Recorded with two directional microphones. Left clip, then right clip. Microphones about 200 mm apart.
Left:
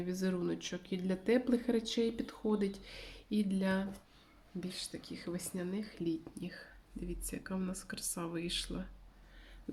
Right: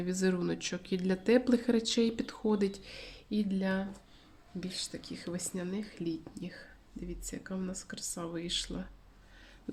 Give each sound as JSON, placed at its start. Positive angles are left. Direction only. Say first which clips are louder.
{"t": 0.0, "sound": "speech", "louder": "right 5 dB", "side_deg": -20}
{"t": 4.6, "sound": "speech", "louder": "right 4 dB", "side_deg": -10}